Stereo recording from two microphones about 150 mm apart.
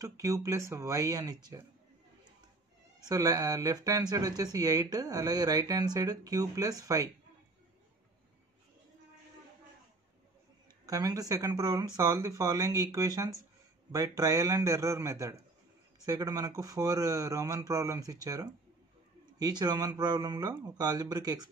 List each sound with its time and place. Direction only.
0.0 s speech: 20° right (ahead or behind)
3.1 s speech: 25° right (ahead or behind)
10.9 s speech: 25° right (ahead or behind)